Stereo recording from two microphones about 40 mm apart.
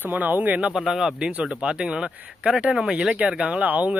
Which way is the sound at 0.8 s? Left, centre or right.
Centre.